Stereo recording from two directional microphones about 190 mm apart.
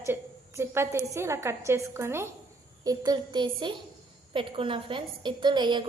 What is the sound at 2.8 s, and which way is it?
A woman's voice, 20° right (ahead or behind).